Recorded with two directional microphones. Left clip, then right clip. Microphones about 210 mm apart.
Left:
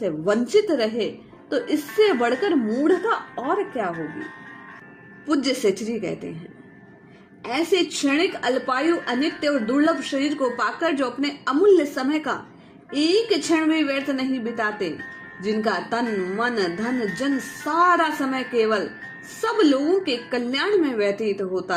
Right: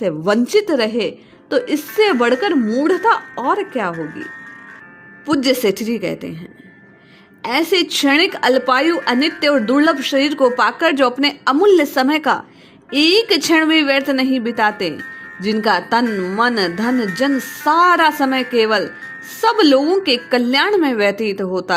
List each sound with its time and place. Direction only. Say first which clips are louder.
0.0 s a woman's voice: right 6 dB; 40° right (ahead or behind)
5.2 s a woman's voice: right 6 dB; 40° right (ahead or behind)
7.4 s a woman's voice: right 6 dB; 45° right (ahead or behind)